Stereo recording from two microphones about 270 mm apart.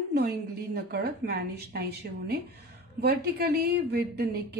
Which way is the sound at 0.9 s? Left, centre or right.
Right.